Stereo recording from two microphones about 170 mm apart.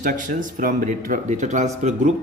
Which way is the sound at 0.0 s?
50° right (ahead or behind).